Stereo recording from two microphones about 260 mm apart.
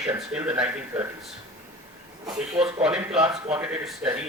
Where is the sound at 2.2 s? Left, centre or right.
Centre.